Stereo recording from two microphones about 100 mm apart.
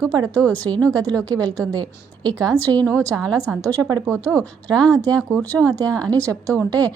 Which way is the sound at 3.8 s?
35° right (ahead or behind).